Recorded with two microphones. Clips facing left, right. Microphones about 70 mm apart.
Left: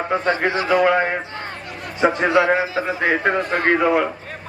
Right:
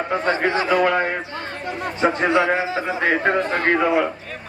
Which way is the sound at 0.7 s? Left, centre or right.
Centre.